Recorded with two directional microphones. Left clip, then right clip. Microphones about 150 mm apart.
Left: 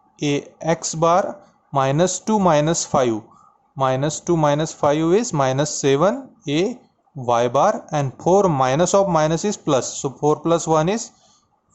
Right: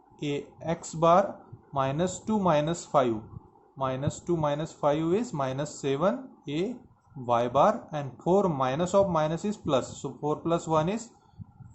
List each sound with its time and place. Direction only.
0.2 s speech: 35° left (ahead or behind)